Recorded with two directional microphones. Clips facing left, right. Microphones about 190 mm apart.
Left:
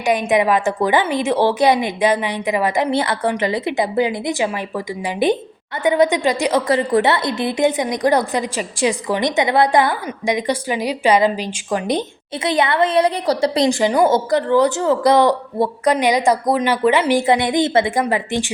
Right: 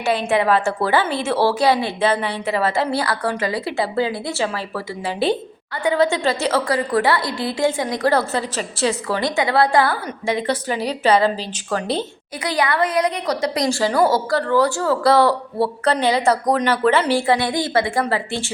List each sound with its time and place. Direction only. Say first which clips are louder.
0.0 s a woman's voice: left 2 dB; 15° left (ahead or behind)
13.7 s a woman's voice: left 1 dB; 20° left (ahead or behind)